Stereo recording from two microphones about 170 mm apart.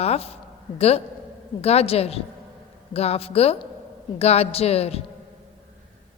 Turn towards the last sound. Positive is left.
turn(degrees=35)  # may be behind; listen again after turning